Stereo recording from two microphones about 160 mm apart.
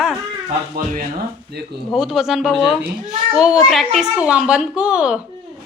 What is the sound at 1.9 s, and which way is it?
Speech, centre (ahead or behind).